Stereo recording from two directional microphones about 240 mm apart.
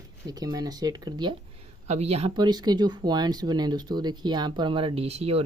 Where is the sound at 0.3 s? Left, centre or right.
Centre.